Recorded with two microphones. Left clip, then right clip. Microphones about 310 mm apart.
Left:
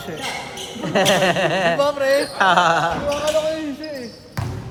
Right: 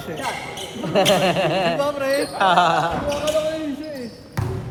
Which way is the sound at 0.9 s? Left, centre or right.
Left.